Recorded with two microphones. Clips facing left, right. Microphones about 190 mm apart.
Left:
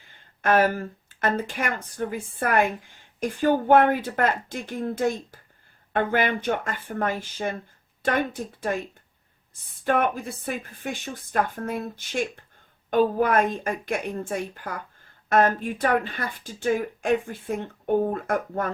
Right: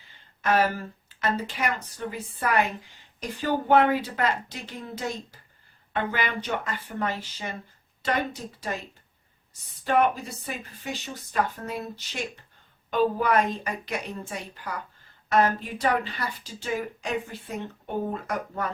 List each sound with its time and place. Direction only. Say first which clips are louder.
0.4 s speech: left 3 dB; 50° left (ahead or behind)
9.8 s speech: even; 50° left (ahead or behind)